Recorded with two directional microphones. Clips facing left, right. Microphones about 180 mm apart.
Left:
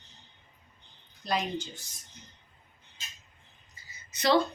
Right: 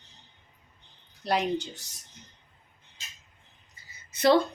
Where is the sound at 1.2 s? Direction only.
65° right (ahead or behind).